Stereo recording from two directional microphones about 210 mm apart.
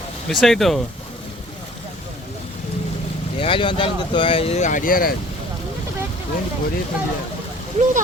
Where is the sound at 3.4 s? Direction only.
25° left (ahead or behind); by 5.1 s 40° left (ahead or behind).